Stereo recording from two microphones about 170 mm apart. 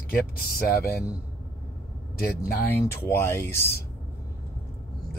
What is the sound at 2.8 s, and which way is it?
Speech, 15° left (ahead or behind).